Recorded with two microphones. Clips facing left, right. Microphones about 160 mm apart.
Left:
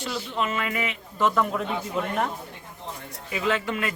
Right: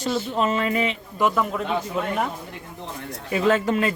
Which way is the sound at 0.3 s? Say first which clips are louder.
Right 3 dB; 40° right (ahead or behind).